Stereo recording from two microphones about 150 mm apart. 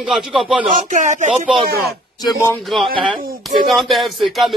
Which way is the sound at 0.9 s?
55° right (ahead or behind).